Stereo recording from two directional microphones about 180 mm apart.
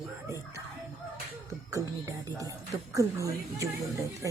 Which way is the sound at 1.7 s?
20° right (ahead or behind).